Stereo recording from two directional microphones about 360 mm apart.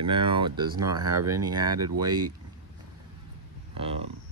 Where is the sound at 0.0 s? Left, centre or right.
Centre.